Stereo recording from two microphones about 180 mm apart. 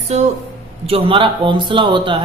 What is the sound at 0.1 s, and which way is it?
A woman's voice, 35° right (ahead or behind).